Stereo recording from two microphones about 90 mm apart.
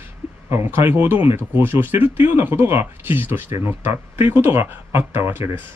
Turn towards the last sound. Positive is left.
turn(degrees=-25)  # may be behind; listen again after turning